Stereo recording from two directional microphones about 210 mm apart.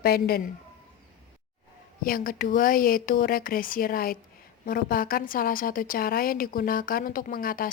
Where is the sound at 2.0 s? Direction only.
45° left (ahead or behind).